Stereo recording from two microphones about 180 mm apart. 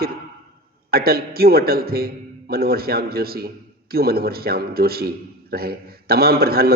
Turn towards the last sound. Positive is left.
turn(degrees=-60)  # may be behind; listen again after turning